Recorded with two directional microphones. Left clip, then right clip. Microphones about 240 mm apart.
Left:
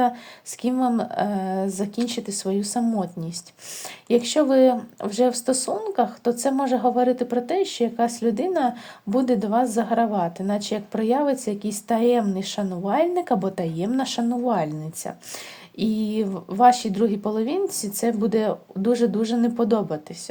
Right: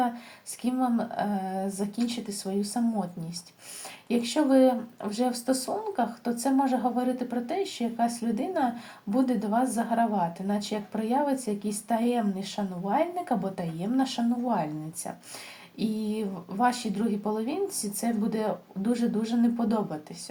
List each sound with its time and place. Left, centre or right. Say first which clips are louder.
0.6 s speech: left 5 dB; left